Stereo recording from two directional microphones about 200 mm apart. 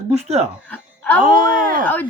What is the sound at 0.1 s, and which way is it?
Speech, 35° right (ahead or behind).